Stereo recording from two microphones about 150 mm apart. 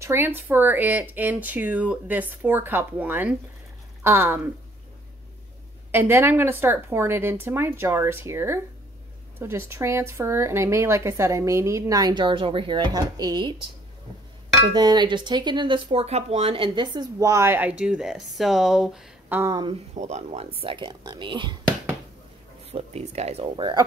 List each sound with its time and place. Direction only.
0.0 s a woman's voice: 15° right (ahead or behind)
5.9 s a woman's voice: 15° right (ahead or behind)
14.7 s speech: 30° right (ahead or behind)
15.9 s a woman's voice: 45° right (ahead or behind); by 19.3 s 5° right (ahead or behind)
19.5 s speech: 30° right (ahead or behind)
20.0 s speech: 50° right (ahead or behind); by 21.5 s 35° right (ahead or behind)
22.7 s speech: 45° right (ahead or behind)